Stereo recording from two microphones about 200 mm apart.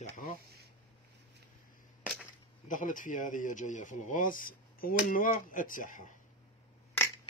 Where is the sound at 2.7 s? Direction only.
40° left (ahead or behind).